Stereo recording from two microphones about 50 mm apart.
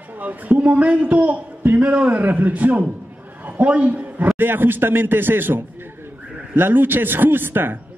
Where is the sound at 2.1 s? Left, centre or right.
Right.